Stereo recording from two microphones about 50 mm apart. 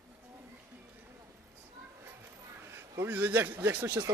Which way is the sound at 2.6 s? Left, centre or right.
Right.